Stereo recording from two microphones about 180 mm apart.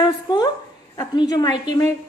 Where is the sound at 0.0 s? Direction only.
25° left (ahead or behind).